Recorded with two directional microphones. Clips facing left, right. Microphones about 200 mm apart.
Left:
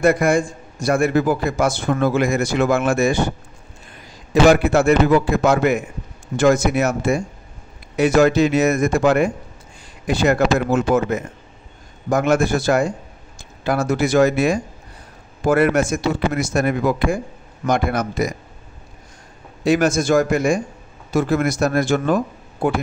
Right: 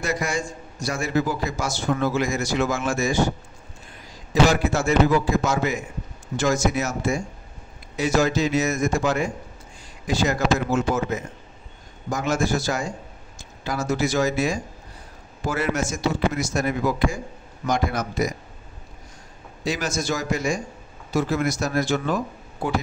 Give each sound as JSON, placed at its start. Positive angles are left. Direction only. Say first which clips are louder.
{"t": 0.0, "sound": "a man's voice", "louder": "left 10 dB", "side_deg": 55}
{"t": 4.3, "sound": "a man's voice", "louder": "left 6 dB", "side_deg": 60}
{"t": 19.6, "sound": "a man's voice", "louder": "left 10 dB", "side_deg": 55}